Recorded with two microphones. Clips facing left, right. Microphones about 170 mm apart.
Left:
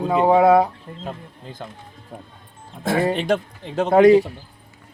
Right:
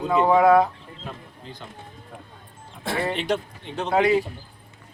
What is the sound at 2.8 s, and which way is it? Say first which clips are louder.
Speech: left 6 dB; 45° left (ahead or behind).